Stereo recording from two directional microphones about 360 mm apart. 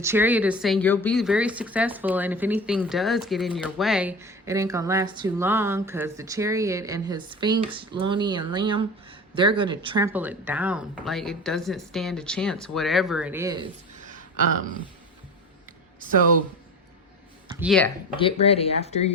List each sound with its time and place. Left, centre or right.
0.0 s speech: centre
17.5 s speech: centre
18.2 s speech: centre